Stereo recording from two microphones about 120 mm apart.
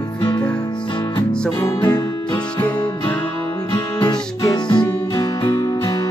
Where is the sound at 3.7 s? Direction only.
40° left (ahead or behind).